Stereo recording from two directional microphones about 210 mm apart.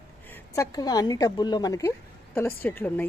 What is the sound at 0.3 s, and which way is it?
A woman's voice, 15° left (ahead or behind).